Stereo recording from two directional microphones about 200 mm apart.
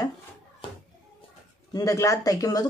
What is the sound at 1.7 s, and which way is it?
Speech, 15° left (ahead or behind).